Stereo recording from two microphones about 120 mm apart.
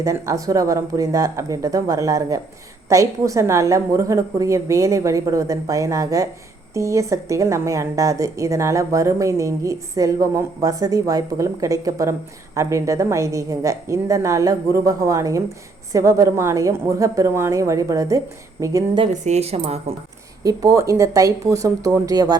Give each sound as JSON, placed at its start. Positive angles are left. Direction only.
{"t": 0.0, "sound": "a woman's voice", "side_deg": -25}
{"t": 19.1, "sound": "speech", "side_deg": -75}
{"t": 20.4, "sound": "a woman's voice", "side_deg": -30}